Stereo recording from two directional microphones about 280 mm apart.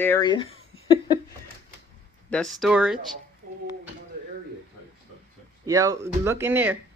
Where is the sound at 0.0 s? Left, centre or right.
Centre.